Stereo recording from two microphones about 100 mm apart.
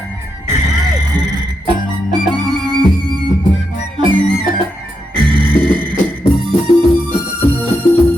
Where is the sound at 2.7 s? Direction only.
45° right (ahead or behind).